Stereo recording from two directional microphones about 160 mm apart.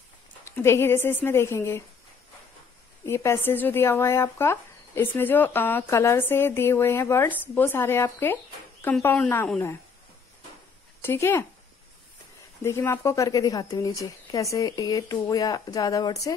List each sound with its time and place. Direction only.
0.5 s speech: 15° left (ahead or behind)
3.1 s speech: 15° left (ahead or behind)
11.0 s speech: 15° left (ahead or behind)